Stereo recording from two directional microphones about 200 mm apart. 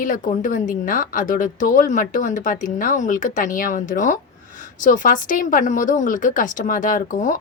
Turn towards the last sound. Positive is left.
turn(degrees=40)  # may be behind; listen again after turning